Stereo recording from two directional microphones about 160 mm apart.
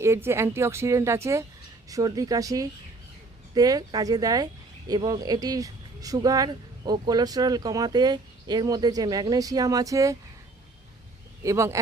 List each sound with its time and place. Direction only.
0.0 s speech: 15° right (ahead or behind)
11.4 s speech: 20° right (ahead or behind)